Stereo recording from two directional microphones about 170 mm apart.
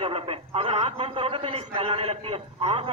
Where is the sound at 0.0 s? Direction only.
35° right (ahead or behind).